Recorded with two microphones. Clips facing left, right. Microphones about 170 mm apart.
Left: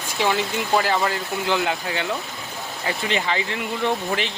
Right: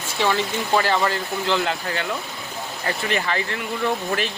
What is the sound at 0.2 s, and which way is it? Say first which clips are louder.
Speech: even; 5° left (ahead or behind).